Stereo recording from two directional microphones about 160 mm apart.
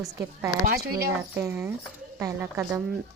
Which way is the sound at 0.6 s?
70° right (ahead or behind).